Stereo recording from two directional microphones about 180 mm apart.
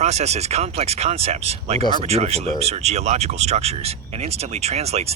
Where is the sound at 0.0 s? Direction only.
35° right (ahead or behind).